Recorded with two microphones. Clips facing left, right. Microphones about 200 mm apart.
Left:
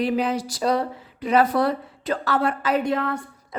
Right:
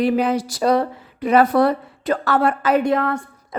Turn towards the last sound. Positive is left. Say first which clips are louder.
# right 4 dB
turn(degrees=-55)  # may be behind; listen again after turning